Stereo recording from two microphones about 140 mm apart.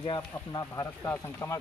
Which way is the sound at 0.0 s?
30° left (ahead or behind).